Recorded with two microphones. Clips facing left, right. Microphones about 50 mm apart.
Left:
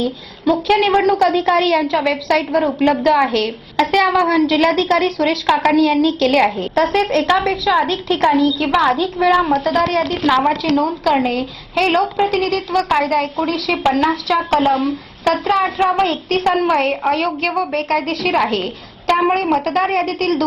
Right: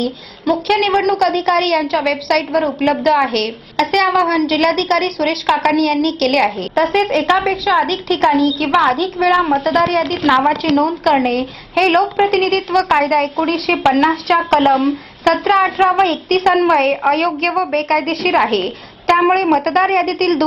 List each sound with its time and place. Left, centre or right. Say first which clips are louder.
0.5 s a woman's voice: even; centre
5.2 s a woman's voice: even; centre
5.8 s a woman's voice: left 1 dB; centre
6.7 s a woman's voice: right 1 dB; centre
10.6 s a woman's voice: right 2 dB; right